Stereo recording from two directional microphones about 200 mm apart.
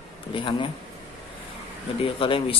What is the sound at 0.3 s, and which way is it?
Speech, 25° left (ahead or behind).